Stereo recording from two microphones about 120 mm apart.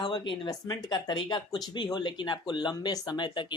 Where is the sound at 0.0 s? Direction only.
40° left (ahead or behind).